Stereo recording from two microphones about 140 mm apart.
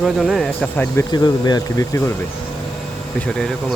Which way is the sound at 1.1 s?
30° left (ahead or behind).